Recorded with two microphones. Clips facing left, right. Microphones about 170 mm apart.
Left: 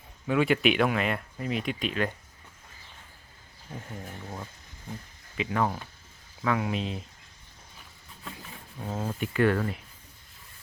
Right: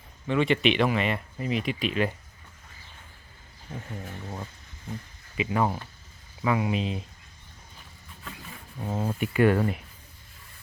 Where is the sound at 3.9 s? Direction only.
5° right (ahead or behind).